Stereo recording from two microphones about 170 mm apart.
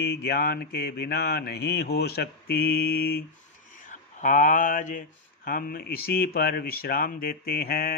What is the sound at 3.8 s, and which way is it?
Speech, 50° left (ahead or behind).